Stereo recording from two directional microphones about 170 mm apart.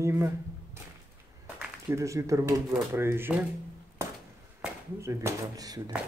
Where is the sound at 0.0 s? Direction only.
15° right (ahead or behind).